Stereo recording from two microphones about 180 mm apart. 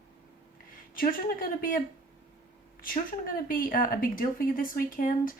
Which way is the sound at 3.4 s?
50° left (ahead or behind).